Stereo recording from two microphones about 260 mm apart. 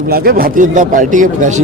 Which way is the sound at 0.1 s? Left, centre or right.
Right.